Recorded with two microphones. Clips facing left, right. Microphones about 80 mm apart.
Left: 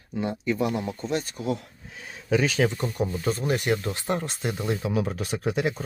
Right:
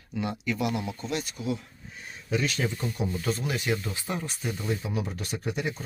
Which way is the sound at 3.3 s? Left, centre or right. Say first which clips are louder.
Left 5 dB; left.